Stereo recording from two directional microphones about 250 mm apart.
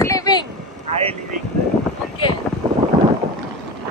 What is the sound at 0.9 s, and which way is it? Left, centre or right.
Speech, right.